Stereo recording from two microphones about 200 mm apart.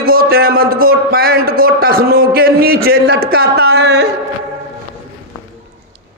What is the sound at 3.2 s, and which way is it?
Speech, 55° right (ahead or behind).